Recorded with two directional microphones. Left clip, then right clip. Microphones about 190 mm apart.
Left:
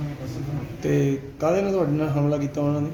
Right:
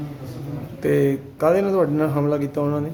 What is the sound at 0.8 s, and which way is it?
Speech, 30° right (ahead or behind).